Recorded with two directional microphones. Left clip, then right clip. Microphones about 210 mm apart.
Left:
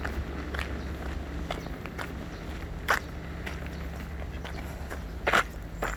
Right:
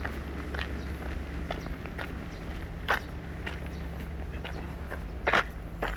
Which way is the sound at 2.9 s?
15° left (ahead or behind).